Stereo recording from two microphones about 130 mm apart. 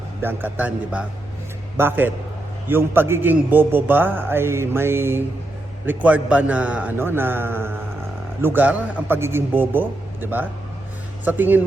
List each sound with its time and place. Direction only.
0.2 s a man's voice: 15° right (ahead or behind)